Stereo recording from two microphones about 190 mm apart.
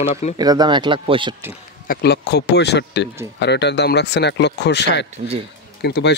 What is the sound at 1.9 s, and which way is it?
Speech, 60° left (ahead or behind).